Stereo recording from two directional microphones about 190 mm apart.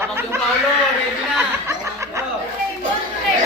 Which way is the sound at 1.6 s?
15° right (ahead or behind).